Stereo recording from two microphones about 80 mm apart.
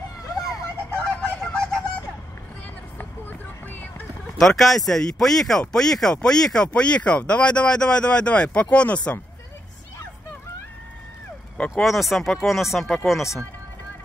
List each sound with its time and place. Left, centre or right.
0.9 s honk: centre
3.0 s vehicle: left
4.4 s speech: centre
11.5 s speech: centre
11.8 s speech: centre